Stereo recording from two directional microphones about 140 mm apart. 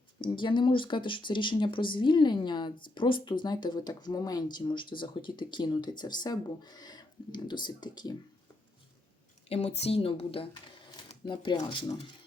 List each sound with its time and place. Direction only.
0.3 s speech: 35° left (ahead or behind)
9.5 s speech: 50° left (ahead or behind); by 11.9 s 35° left (ahead or behind)